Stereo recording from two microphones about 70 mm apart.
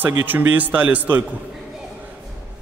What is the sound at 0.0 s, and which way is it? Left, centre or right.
A man's voice, right.